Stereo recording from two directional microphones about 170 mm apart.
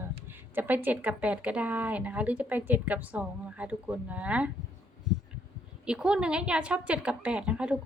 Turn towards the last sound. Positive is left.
turn(degrees=-5)  # may be behind; listen again after turning